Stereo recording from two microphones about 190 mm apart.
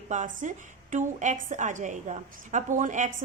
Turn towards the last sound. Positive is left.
turn(degrees=-40)  # may be behind; listen again after turning